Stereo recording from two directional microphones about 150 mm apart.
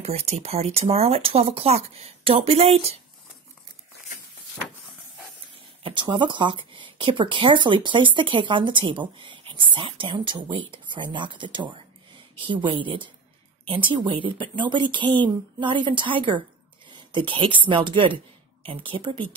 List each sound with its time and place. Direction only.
0.0 s speech: 45° right (ahead or behind)
5.9 s speech: 30° right (ahead or behind)